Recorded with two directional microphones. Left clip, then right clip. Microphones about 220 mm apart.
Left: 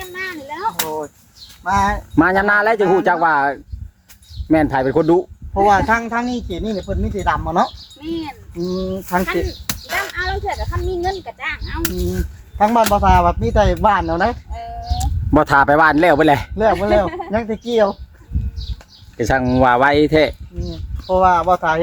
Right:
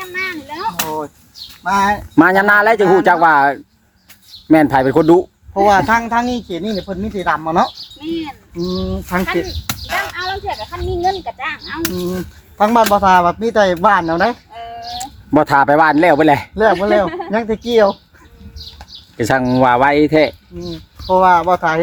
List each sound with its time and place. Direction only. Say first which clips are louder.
0.0 s a sound: right 5 dB; 10° left (ahead or behind)
0.9 s a sound: right 2 dB; 30° right (ahead or behind)
1.6 s speech: right 2 dB; 35° right (ahead or behind)
2.1 s speech: right 4 dB; 10° right (ahead or behind)
5.5 s speech: right 2 dB; 35° right (ahead or behind)
9.2 s speech: right 2 dB; 5° left (ahead or behind)
12.5 s speech: right 2 dB; 35° right (ahead or behind)
14.5 s speech: right 1 dB; 5° left (ahead or behind)
16.8 s speech: right 2 dB; 30° right (ahead or behind)
19.1 s speech: right 2 dB; centre (ahead or behind)
20.6 s speech: right 4 dB; 25° right (ahead or behind)